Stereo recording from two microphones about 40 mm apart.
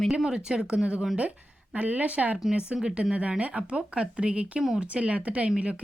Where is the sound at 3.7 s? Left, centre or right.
Right.